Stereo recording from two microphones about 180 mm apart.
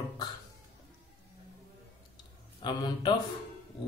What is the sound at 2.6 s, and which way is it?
Speech, 25° left (ahead or behind).